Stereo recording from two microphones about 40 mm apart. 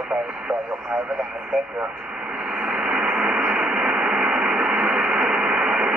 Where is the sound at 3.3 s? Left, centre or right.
Right.